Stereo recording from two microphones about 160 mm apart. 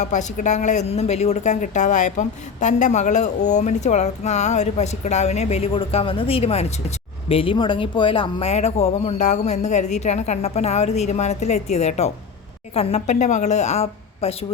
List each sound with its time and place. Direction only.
0.0 s a woman's voice: 50° left (ahead or behind)